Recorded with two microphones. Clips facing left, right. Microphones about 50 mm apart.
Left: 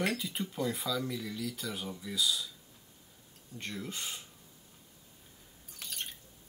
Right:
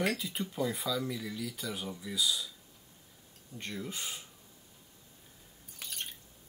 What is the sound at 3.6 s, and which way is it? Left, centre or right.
Speech, centre.